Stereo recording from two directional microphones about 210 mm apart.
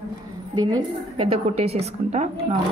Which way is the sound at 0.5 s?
80° right.